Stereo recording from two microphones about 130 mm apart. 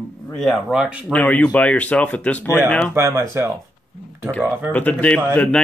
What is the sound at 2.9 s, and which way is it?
Speech, 20° right (ahead or behind).